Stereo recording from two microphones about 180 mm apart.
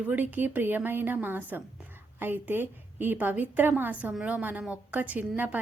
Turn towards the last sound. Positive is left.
turn(degrees=-10)  # may be behind; listen again after turning